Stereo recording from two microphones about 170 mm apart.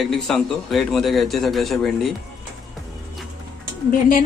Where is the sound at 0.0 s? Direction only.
Centre (ahead or behind).